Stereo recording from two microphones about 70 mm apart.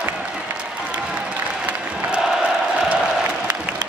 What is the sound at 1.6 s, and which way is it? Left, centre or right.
Applause, centre.